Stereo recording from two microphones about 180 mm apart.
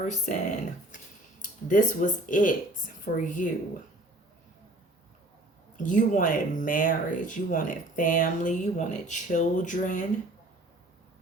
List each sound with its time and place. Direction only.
0.0 s speech: 45° left (ahead or behind)
5.7 s speech: 45° left (ahead or behind)